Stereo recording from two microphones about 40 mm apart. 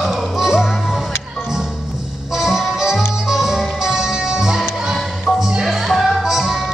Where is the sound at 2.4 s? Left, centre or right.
Centre.